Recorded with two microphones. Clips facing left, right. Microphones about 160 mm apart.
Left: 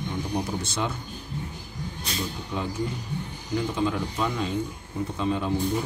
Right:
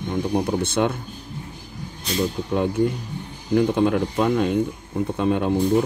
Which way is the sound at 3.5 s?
55° right (ahead or behind).